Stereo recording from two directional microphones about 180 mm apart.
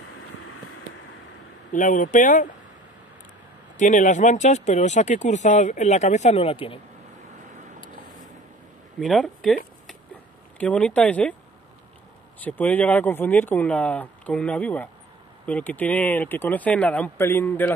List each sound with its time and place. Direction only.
1.7 s speech: 45° left (ahead or behind)
3.7 s speech: 45° left (ahead or behind)
9.0 s speech: centre (ahead or behind)
10.6 s speech: 5° left (ahead or behind)
12.4 s speech: 10° left (ahead or behind)